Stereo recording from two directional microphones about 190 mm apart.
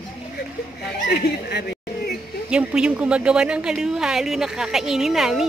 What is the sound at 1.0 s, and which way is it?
Speech, 55° left (ahead or behind).